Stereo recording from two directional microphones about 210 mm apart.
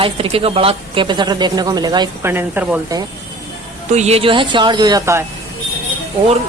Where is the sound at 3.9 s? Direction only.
30° right (ahead or behind); by 5.2 s 15° right (ahead or behind).